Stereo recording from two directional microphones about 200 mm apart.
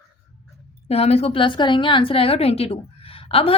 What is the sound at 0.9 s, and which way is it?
A woman's voice, 30° left (ahead or behind).